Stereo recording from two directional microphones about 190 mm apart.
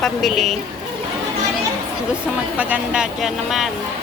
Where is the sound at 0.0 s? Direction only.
Centre (ahead or behind).